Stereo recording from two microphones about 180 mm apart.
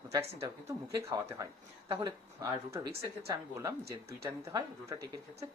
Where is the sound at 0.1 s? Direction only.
15° right (ahead or behind).